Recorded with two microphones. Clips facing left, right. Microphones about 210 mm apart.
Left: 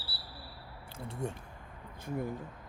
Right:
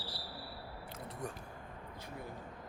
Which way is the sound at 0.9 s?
30° left (ahead or behind).